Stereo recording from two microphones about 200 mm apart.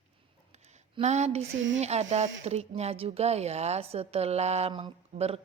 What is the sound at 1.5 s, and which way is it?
Speech, 70° right (ahead or behind).